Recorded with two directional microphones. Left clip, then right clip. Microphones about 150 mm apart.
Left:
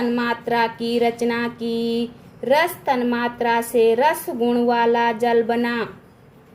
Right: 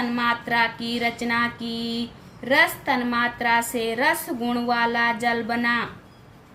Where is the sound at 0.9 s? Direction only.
30° left (ahead or behind).